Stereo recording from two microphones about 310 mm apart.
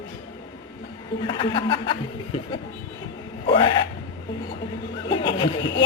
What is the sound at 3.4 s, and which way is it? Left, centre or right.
Speech, centre.